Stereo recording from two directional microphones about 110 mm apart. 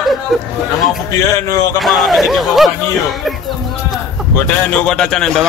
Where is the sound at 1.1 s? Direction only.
25° left (ahead or behind).